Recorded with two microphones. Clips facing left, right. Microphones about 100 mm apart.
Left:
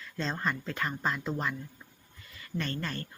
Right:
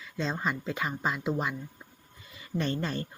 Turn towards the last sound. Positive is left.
turn(degrees=-20)  # may be behind; listen again after turning